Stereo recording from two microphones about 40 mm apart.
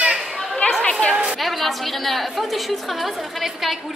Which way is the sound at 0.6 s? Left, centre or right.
Left.